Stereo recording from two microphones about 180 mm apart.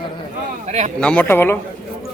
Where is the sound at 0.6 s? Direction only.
40° right (ahead or behind).